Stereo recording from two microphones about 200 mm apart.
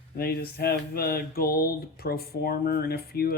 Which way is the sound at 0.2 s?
50° left (ahead or behind).